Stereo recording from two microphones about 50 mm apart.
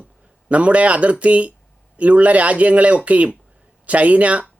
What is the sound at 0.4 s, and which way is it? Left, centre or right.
A man's voice, right.